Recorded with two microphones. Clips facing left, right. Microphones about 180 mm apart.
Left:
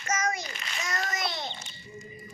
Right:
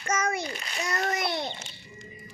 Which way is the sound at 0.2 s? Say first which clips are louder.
Right 2 dB; 55° right (ahead or behind).